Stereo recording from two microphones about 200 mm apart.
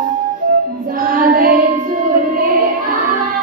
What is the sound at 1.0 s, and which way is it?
Music, 45° right (ahead or behind).